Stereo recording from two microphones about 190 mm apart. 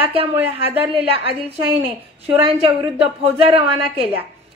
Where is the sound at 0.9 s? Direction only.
30° right (ahead or behind).